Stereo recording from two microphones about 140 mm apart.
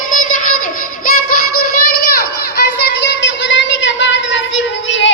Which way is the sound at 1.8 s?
90° left.